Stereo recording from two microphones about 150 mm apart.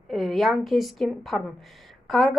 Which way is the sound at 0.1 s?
Centre (ahead or behind).